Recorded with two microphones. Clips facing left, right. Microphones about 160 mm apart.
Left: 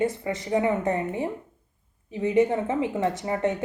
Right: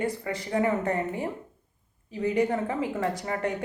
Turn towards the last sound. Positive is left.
turn(degrees=25)  # may be behind; listen again after turning